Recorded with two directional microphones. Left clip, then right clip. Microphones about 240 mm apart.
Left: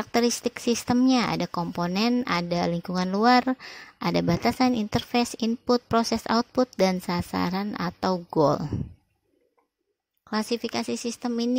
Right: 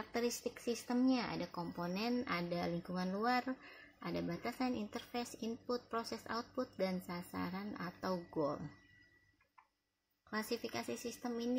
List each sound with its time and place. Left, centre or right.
0.0 s a woman's voice: left
10.3 s a woman's voice: left